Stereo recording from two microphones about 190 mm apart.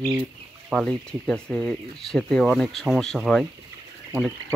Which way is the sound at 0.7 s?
5° left (ahead or behind).